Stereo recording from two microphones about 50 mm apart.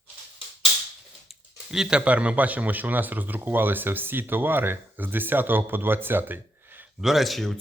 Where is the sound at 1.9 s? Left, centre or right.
Right.